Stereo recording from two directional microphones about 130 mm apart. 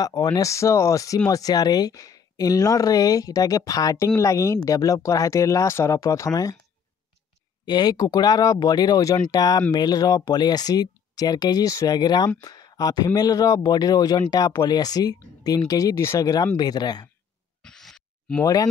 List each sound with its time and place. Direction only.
0.0 s speech: 30° left (ahead or behind)
7.6 s speech: 35° left (ahead or behind)
17.6 s a sound: 5° left (ahead or behind)
18.4 s speech: 30° left (ahead or behind)